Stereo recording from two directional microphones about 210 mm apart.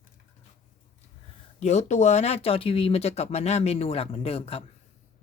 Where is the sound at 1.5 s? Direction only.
30° left (ahead or behind).